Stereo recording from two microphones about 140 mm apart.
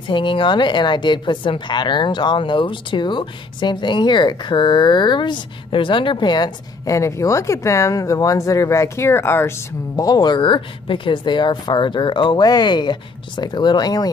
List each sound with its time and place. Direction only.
0.1 s a woman's voice: 35° left (ahead or behind); by 9.5 s 15° left (ahead or behind)
9.9 s a woman's voice: 25° left (ahead or behind)